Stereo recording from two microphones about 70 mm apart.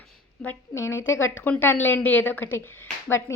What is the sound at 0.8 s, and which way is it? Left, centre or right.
Speech, left.